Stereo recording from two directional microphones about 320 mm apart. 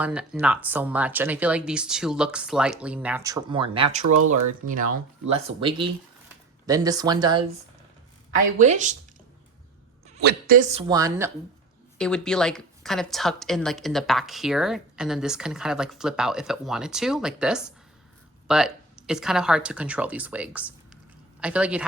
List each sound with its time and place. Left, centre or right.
0.0 s a woman's voice: centre
8.5 s speech: right
10.2 s speech: right; by 11.3 s centre
11.9 s a woman's voice: centre